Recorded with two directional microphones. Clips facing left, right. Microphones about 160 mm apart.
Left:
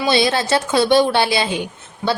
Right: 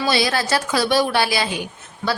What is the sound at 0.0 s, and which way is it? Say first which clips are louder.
A woman's voice: left 3 dB; 25° left (ahead or behind).